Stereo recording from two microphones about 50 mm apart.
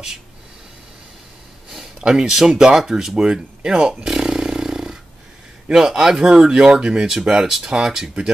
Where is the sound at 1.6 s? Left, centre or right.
Centre.